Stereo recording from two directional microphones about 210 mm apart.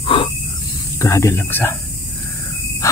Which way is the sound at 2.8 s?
15° left (ahead or behind).